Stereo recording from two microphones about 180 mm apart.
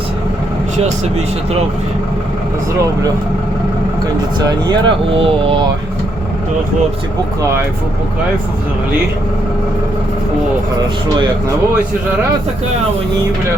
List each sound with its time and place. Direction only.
4.4 s speech: 25° right (ahead or behind)